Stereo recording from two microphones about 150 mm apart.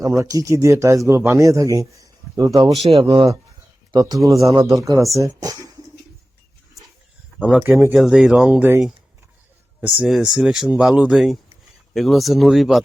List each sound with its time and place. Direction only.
0.0 s speech: 25° right (ahead or behind)
2.7 s speech: 40° right (ahead or behind)
3.9 s speech: 25° right (ahead or behind)
7.3 s speech: 10° right (ahead or behind)
7.9 s speech: centre (ahead or behind)
9.8 s speech: 5° right (ahead or behind)